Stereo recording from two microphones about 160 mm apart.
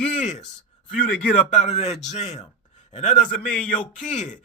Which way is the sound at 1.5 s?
50° left (ahead or behind).